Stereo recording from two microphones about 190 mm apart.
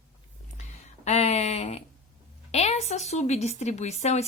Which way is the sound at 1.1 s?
35° left (ahead or behind).